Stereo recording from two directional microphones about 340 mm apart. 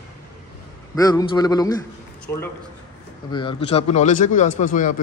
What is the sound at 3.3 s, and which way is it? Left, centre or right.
A man's voice, centre.